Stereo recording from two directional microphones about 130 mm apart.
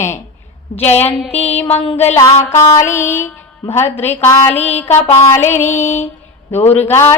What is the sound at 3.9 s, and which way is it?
Speech, 55° left (ahead or behind).